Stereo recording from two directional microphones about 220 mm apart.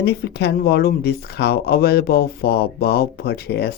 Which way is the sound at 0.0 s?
50° left (ahead or behind).